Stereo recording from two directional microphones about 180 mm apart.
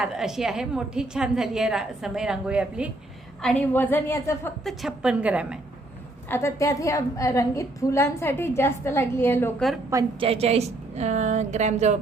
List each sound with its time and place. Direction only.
0.0 s a woman's voice: 5° right (ahead or behind)
3.4 s a woman's voice: 5° left (ahead or behind)
4.6 s a woman's voice: centre (ahead or behind)
6.2 s a woman's voice: 15° left (ahead or behind)
9.9 s a woman's voice: 20° right (ahead or behind)
10.2 s a woman's voice: 35° right (ahead or behind)